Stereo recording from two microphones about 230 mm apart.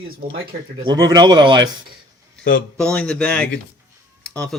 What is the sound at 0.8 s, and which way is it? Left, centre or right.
Speech, centre.